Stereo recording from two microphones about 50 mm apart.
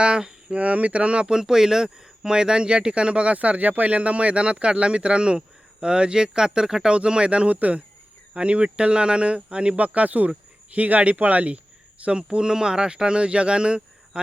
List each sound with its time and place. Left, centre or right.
0.0 s speech: centre
0.5 s speech: right